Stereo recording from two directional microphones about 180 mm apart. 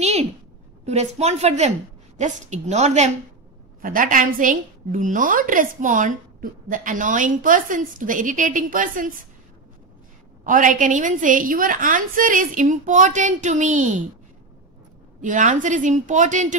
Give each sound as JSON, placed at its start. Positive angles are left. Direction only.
{"t": 0.0, "sound": "a sound", "side_deg": -35}
{"t": 0.8, "sound": "a woman's voice", "side_deg": -35}
{"t": 3.8, "sound": "a woman's voice", "side_deg": -50}
{"t": 10.4, "sound": "a woman's voice", "side_deg": -45}
{"t": 15.2, "sound": "a woman's voice", "side_deg": -45}